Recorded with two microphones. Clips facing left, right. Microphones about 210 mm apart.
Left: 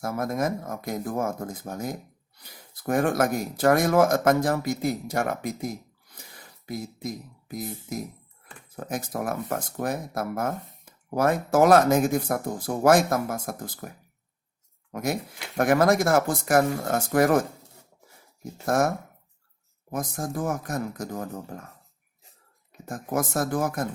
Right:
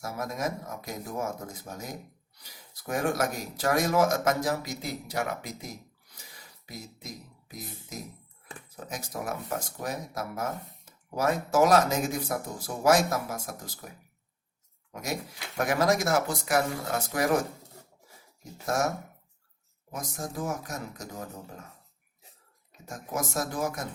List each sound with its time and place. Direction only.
0.0 s speech: 55° left (ahead or behind)
14.9 s speech: 55° left (ahead or behind)
18.6 s speech: 55° left (ahead or behind)
22.9 s speech: 55° left (ahead or behind)